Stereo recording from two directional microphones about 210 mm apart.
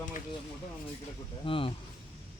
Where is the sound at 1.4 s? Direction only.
25° left (ahead or behind).